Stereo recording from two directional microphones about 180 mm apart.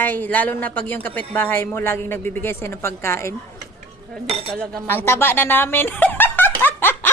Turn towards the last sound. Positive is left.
turn(degrees=10)  # may be behind; listen again after turning